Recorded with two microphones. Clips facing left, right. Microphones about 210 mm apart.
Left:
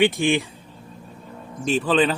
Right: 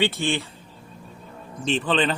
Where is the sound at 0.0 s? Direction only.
15° left (ahead or behind).